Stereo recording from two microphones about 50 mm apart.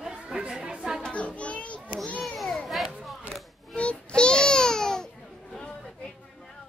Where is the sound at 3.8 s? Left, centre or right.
Left.